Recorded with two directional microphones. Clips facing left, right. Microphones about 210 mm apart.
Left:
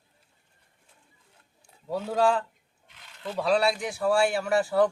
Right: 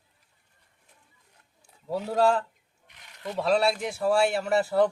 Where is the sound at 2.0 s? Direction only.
Centre (ahead or behind).